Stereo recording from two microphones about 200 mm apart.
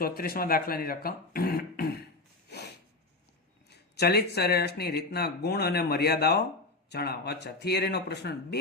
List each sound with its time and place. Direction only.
0.0 s speech: 45° left (ahead or behind)
3.7 s speech: 55° left (ahead or behind)